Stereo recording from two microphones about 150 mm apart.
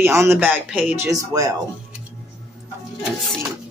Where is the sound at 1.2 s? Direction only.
25° right (ahead or behind).